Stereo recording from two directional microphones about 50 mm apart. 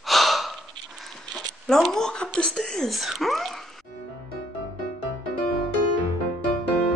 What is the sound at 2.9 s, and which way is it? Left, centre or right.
Speech, centre.